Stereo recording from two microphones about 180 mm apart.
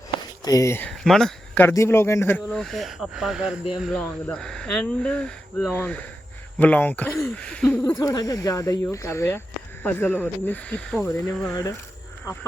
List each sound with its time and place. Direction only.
0.4 s speech: 15° left (ahead or behind)
0.9 s a sound: centre (ahead or behind)
1.6 s speech: 15° left (ahead or behind)
2.5 s speech: centre (ahead or behind)
7.9 s speech: 20° left (ahead or behind); by 11.5 s 5° left (ahead or behind)
12.2 s speech: 15° left (ahead or behind)